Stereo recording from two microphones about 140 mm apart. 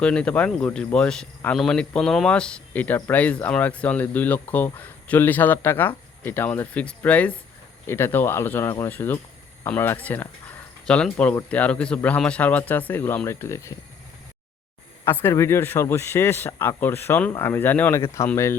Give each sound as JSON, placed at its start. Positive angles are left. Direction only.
{"t": 0.0, "sound": "speech", "side_deg": 10}
{"t": 15.0, "sound": "speech", "side_deg": 15}